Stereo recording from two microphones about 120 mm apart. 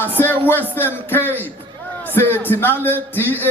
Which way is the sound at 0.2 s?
15° left (ahead or behind).